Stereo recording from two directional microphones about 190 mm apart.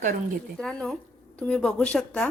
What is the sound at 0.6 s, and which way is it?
Speech, centre (ahead or behind).